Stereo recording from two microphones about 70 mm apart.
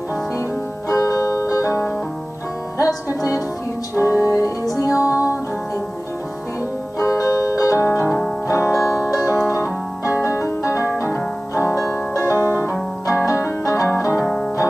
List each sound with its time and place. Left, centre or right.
0.4 s music: left
3.2 s music: left
7.0 s music: left
7.8 s music: left
12.2 s music: right
13.0 s zither: left
14.2 s music: centre